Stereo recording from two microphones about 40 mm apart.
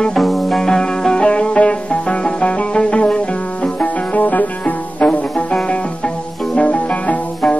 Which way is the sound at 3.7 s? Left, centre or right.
Left.